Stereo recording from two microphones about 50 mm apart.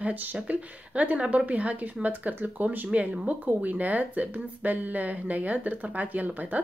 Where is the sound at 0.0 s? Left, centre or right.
Right.